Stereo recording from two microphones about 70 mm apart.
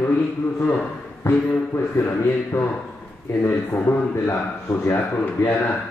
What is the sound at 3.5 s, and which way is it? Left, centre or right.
A man's voice, left.